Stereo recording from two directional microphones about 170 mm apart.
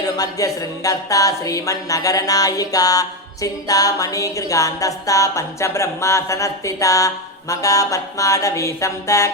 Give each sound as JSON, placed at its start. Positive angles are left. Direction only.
{"t": 0.2, "sound": "music", "side_deg": 20}